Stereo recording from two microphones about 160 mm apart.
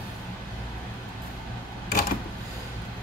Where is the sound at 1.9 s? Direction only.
70° left (ahead or behind).